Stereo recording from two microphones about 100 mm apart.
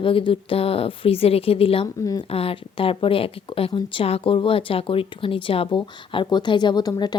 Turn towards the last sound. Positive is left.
turn(degrees=45)  # may be behind; listen again after turning